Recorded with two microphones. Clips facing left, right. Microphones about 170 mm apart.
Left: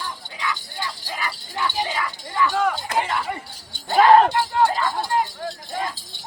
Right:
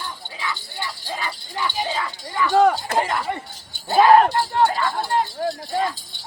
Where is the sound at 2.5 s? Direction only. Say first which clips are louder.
Right 6 dB; 40° right (ahead or behind).